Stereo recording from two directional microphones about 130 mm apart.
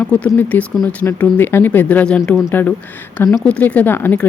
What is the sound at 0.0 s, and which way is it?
Speech, 10° left (ahead or behind).